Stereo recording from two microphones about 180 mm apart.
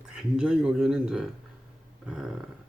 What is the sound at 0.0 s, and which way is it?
Speech, 5° right (ahead or behind).